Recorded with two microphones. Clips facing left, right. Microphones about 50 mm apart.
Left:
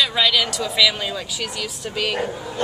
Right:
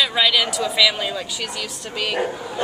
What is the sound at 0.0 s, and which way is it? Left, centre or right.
Speech, centre.